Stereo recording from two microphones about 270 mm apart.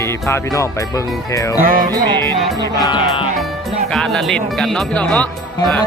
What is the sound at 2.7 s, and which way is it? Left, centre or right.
Music, centre.